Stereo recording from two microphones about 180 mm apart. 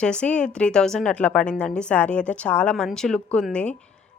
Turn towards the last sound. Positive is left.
turn(degrees=5)  # may be behind; listen again after turning